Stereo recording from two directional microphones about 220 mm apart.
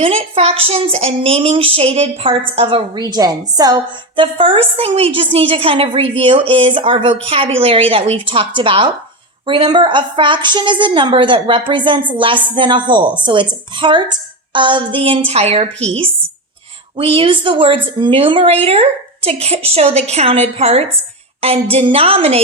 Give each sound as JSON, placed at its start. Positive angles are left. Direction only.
{"t": 0.0, "sound": "a woman's voice", "side_deg": -25}
{"t": 17.0, "sound": "a woman's voice", "side_deg": -25}